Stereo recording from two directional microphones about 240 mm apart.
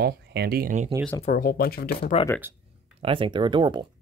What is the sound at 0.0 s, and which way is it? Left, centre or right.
Speech, right.